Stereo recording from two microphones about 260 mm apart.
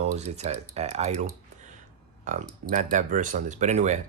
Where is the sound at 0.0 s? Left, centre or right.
Right.